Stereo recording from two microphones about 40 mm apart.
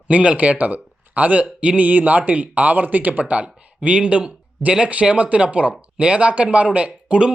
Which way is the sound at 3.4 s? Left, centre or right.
Right.